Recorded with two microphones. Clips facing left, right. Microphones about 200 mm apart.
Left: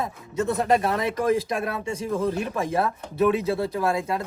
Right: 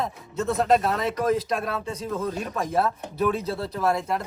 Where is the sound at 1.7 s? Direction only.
15° left (ahead or behind).